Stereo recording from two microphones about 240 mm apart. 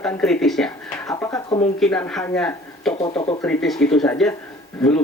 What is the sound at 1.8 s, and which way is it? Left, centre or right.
Speech, centre.